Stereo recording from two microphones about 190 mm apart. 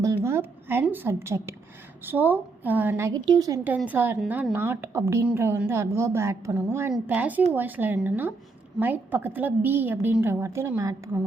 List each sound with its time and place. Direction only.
0.3 s a woman's voice: 15° right (ahead or behind)
3.6 s a woman's voice: 10° right (ahead or behind)